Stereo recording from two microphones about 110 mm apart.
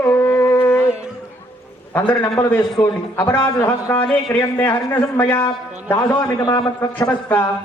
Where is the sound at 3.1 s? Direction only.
20° left (ahead or behind).